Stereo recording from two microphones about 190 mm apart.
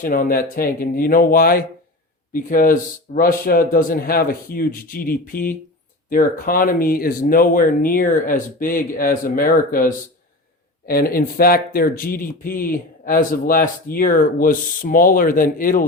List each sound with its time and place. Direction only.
0.0 s speech: 45° left (ahead or behind)